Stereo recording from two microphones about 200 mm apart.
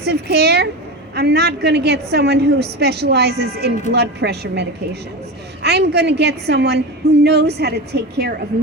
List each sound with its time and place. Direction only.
0.0 s a woman's voice: 55° right (ahead or behind)